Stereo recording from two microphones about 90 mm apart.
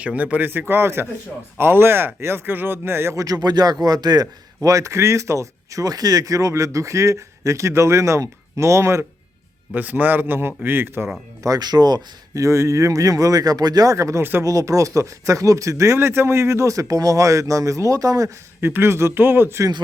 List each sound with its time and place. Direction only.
0.0 s speech: 15° right (ahead or behind)
3.2 s a man's voice: 45° right (ahead or behind)
9.7 s speech: 20° right (ahead or behind)
11.4 s a man's voice: 45° right (ahead or behind)
18.6 s speech: 25° right (ahead or behind)